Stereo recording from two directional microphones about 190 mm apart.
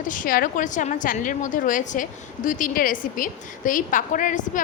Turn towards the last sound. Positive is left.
turn(degrees=45)  # may be behind; listen again after turning